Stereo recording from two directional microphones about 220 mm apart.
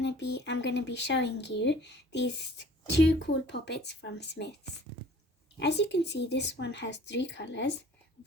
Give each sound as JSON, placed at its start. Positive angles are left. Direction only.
{"t": 0.0, "sound": "speech", "side_deg": 50}
{"t": 5.5, "sound": "speech", "side_deg": 50}